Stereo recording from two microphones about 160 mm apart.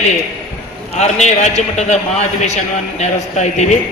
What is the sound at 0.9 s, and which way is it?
A man's voice, 45° left (ahead or behind).